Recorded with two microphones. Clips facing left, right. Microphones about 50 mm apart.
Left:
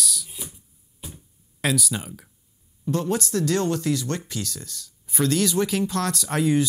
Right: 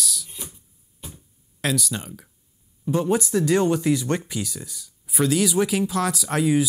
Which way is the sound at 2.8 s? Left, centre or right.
Centre.